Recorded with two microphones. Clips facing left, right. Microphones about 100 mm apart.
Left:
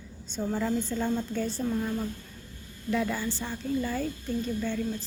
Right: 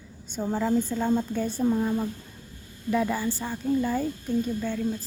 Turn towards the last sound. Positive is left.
turn(degrees=-5)  # may be behind; listen again after turning